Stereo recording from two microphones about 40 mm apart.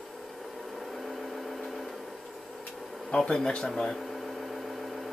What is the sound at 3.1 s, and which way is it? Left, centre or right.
Speech, centre.